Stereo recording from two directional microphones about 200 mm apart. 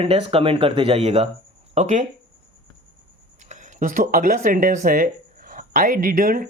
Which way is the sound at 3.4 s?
35° right (ahead or behind).